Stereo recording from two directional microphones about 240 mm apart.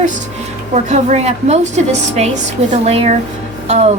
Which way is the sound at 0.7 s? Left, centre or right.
Right.